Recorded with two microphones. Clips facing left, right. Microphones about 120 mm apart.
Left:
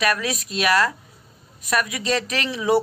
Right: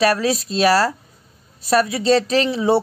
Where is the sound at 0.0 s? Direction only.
30° right (ahead or behind).